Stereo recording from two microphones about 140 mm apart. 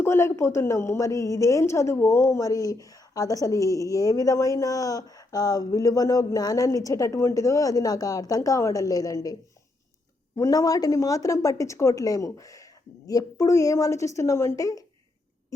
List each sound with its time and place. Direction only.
0.0 s a woman's voice: 20° left (ahead or behind)
10.3 s a woman's voice: 25° left (ahead or behind)